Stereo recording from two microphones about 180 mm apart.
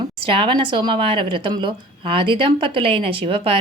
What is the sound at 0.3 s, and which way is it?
A woman's voice, 30° right (ahead or behind).